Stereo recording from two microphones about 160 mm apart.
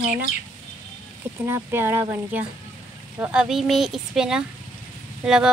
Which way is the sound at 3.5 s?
Centre (ahead or behind).